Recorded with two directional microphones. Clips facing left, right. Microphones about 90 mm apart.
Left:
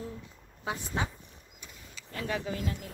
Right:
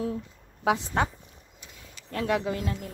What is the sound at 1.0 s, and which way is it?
Speech, 60° right (ahead or behind).